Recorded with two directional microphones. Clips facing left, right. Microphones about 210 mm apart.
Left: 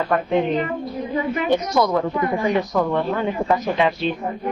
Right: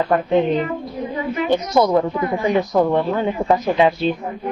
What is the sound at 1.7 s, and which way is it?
Speech, 25° right (ahead or behind).